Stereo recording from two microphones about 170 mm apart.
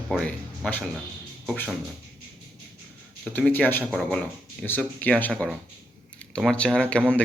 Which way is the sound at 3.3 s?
10° left (ahead or behind).